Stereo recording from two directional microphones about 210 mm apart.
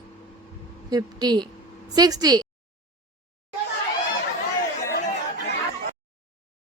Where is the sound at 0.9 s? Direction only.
20° right (ahead or behind).